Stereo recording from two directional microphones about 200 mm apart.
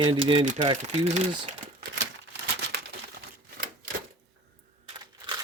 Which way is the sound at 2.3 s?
55° right (ahead or behind).